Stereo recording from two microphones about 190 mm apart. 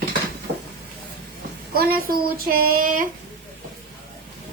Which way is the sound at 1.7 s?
50° right (ahead or behind).